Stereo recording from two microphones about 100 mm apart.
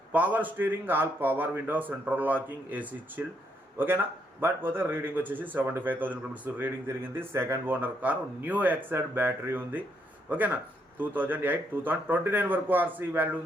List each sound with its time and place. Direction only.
0.1 s a man's voice: 15° right (ahead or behind)